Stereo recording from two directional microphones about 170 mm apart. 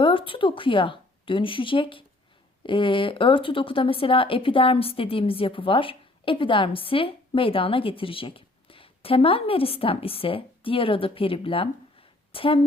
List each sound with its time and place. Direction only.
0.0 s speech: 30° left (ahead or behind)